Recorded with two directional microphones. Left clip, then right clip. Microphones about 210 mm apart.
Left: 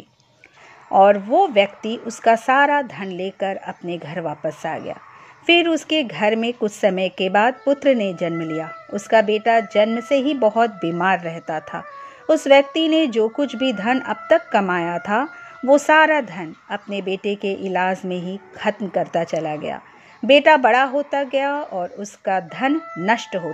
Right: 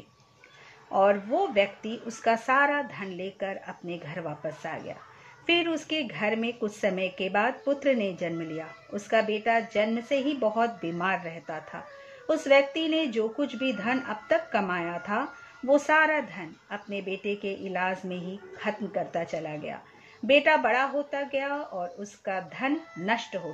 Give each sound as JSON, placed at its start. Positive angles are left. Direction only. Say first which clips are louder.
{"t": 0.9, "sound": "speech", "louder": "left 10 dB", "side_deg": 30}